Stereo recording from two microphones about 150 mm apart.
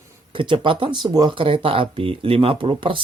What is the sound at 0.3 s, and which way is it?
Speech, 35° right (ahead or behind).